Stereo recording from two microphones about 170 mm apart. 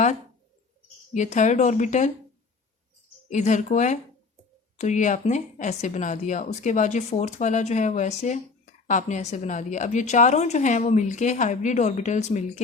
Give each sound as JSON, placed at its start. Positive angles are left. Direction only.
{"t": 1.1, "sound": "speech", "side_deg": 45}
{"t": 3.2, "sound": "speech", "side_deg": 45}